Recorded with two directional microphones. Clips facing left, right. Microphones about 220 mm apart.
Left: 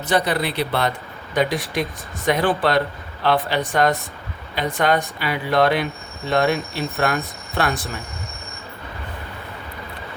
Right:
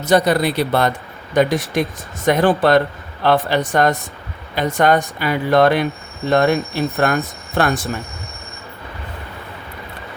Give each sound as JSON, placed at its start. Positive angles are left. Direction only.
{"t": 0.0, "sound": "speech", "side_deg": -45}